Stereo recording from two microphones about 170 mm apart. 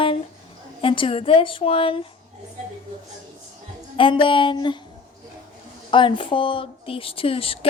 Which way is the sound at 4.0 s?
30° left (ahead or behind).